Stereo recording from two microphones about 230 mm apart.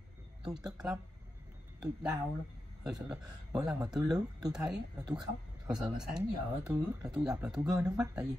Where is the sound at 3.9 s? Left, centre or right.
Centre.